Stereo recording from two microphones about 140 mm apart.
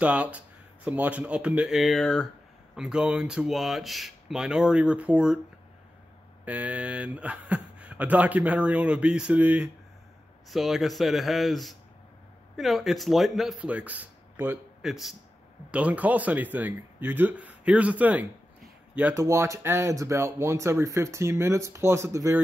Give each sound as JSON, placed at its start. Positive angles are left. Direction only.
{"t": 0.0, "sound": "speech", "side_deg": -10}
{"t": 6.4, "sound": "speech", "side_deg": -10}
{"t": 14.3, "sound": "a sound", "side_deg": -15}
{"t": 14.8, "sound": "speech", "side_deg": 0}
{"t": 19.1, "sound": "speech", "side_deg": -20}